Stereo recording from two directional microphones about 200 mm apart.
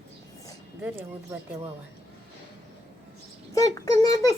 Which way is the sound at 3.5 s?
15° left (ahead or behind).